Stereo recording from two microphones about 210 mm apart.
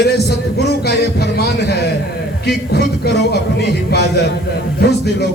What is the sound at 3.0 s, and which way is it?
A man's voice, 50° left (ahead or behind).